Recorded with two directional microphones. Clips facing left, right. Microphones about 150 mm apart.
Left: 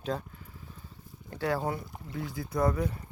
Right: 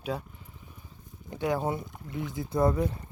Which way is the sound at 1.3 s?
20° right (ahead or behind).